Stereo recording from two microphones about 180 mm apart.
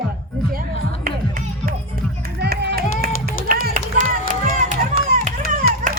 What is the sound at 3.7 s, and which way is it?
Run, 45° right (ahead or behind).